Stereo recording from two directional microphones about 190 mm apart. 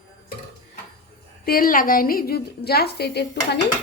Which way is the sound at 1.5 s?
50° left (ahead or behind).